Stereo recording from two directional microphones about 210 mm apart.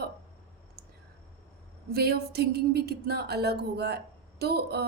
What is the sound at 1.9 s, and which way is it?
Speech, 50° right (ahead or behind).